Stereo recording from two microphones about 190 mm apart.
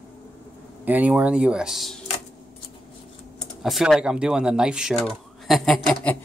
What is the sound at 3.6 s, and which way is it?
Speech, centre (ahead or behind).